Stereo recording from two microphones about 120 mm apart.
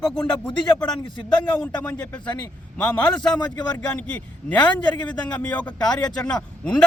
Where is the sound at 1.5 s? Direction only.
10° left (ahead or behind).